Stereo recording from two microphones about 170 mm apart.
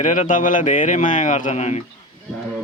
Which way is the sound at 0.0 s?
50° left (ahead or behind).